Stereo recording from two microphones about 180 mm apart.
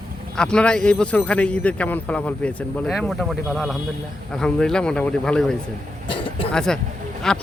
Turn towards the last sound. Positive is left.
turn(degrees=0)  # may be behind; listen again after turning